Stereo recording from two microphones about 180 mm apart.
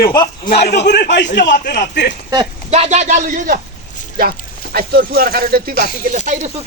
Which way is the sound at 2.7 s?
35° right (ahead or behind).